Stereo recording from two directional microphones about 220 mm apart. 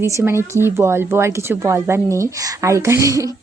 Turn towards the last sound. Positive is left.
turn(degrees=-15)  # may be behind; listen again after turning